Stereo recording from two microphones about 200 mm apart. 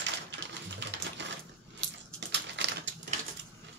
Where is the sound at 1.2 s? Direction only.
60° right (ahead or behind).